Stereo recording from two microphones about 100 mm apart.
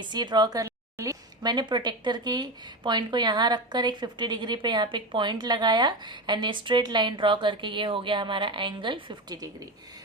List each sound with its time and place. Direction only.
0.0 s speech: 45° right (ahead or behind)
0.6 s a sound: 30° right (ahead or behind)
1.4 s speech: 45° right (ahead or behind)